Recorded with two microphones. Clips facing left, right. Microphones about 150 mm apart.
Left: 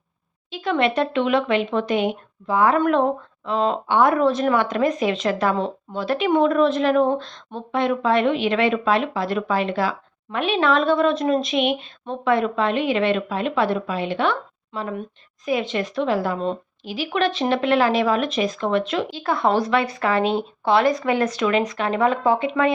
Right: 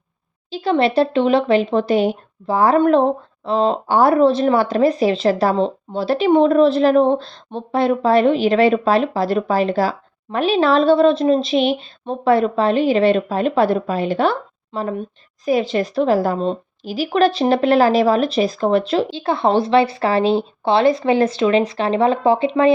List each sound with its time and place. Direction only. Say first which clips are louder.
0.5 s speech: right 5 dB; 30° right (ahead or behind)